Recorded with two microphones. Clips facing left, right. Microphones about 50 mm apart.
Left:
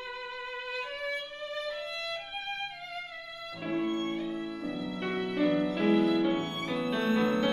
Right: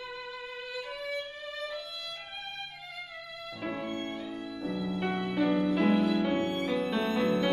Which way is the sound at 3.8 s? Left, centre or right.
Centre.